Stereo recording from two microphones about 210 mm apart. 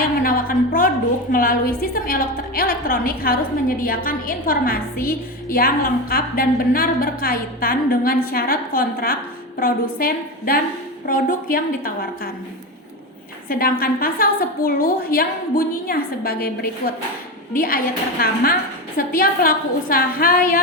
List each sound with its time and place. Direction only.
0.0 s a sound: 40° left (ahead or behind)
1.3 s a woman's voice: 40° left (ahead or behind)
13.5 s a woman's voice: 45° left (ahead or behind)